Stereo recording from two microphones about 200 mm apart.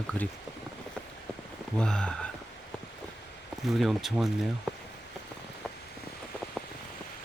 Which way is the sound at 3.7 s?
Centre (ahead or behind).